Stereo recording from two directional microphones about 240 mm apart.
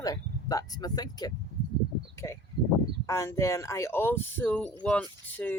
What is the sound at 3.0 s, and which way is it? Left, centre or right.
Speech, centre.